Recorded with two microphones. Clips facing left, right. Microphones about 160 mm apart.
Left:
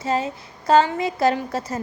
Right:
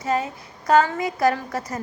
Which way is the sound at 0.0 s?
25° left (ahead or behind).